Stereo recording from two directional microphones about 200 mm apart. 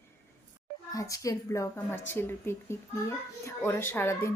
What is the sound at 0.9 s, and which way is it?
Speech, 15° left (ahead or behind).